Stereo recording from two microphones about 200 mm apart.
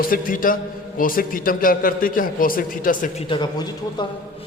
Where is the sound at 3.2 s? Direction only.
25° left (ahead or behind).